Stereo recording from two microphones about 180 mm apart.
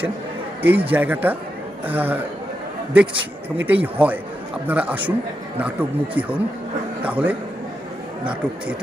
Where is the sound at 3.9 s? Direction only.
10° right (ahead or behind).